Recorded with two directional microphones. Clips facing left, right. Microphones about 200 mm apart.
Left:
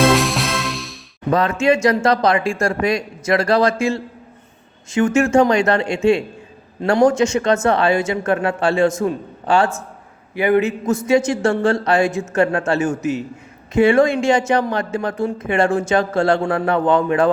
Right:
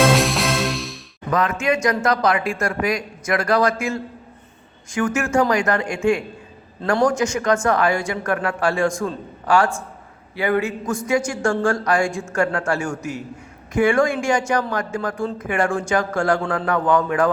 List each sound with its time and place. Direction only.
0.0 s music: centre (ahead or behind)
1.3 s speech: 30° left (ahead or behind)